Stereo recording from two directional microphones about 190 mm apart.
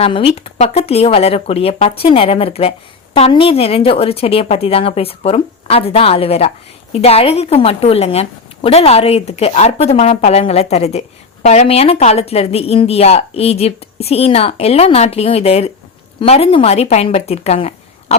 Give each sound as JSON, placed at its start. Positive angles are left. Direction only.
{"t": 0.0, "sound": "a woman's voice", "side_deg": 30}